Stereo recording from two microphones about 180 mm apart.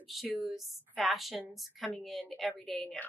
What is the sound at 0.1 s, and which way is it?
A woman's voice, centre (ahead or behind).